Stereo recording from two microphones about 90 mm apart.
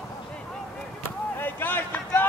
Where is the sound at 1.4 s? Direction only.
20° left (ahead or behind).